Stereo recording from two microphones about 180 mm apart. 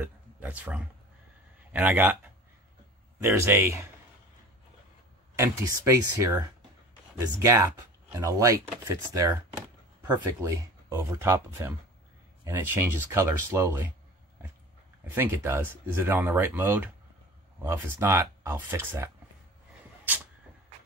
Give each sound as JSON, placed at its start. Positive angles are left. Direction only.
{"t": 0.0, "sound": "a sound", "side_deg": -10}
{"t": 1.7, "sound": "speech", "side_deg": -10}
{"t": 3.2, "sound": "speech", "side_deg": -15}
{"t": 5.4, "sound": "speech", "side_deg": -15}
{"t": 15.0, "sound": "speech", "side_deg": -15}